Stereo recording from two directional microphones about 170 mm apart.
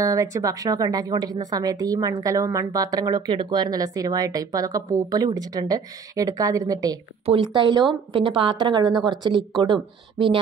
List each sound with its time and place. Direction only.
0.0 s a woman's voice: 20° right (ahead or behind)